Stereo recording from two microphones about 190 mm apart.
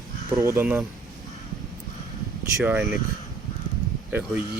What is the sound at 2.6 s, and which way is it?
Speech, 10° right (ahead or behind).